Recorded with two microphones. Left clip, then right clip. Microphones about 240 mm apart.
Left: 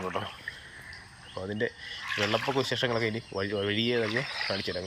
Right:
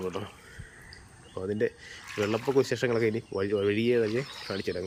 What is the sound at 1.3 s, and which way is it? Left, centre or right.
Speech, centre.